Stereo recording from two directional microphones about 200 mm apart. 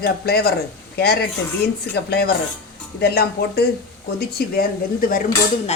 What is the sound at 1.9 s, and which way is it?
Speech, 55° left (ahead or behind).